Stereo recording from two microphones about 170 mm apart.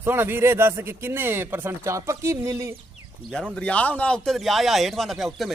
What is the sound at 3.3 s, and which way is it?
Speech, 5° left (ahead or behind).